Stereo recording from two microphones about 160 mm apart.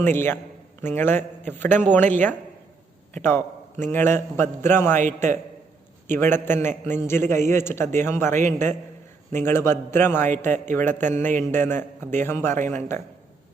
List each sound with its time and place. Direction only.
0.0 s a man's voice: 15° left (ahead or behind)
4.9 s a man's voice: 50° right (ahead or behind)
6.1 s a man's voice: 15° left (ahead or behind)
10.3 s a man's voice: 50° right (ahead or behind)
10.7 s a man's voice: 15° left (ahead or behind)